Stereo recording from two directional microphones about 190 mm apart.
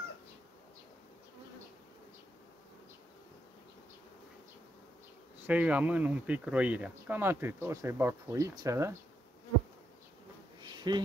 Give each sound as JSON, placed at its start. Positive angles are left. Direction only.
{"t": 5.5, "sound": "speech", "side_deg": -5}
{"t": 10.6, "sound": "insect", "side_deg": -20}